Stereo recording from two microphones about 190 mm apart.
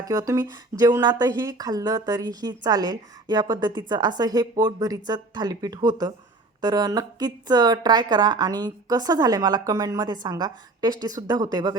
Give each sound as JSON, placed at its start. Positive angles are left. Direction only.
{"t": 0.0, "sound": "a woman's voice", "side_deg": -20}